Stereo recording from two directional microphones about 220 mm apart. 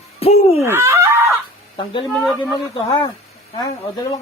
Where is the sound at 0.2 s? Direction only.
25° left (ahead or behind).